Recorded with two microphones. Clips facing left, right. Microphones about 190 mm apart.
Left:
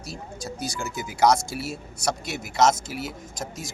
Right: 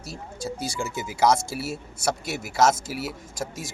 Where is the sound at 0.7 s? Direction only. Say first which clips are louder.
Right 2 dB; 5° right (ahead or behind).